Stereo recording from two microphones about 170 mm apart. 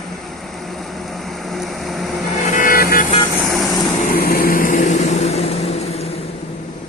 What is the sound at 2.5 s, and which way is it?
Vehicle, 50° left (ahead or behind).